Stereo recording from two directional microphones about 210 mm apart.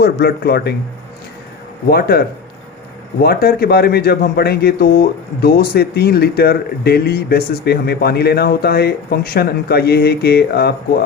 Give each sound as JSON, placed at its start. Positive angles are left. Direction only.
{"t": 0.0, "sound": "a man's voice", "side_deg": 50}
{"t": 1.9, "sound": "a man's voice", "side_deg": 45}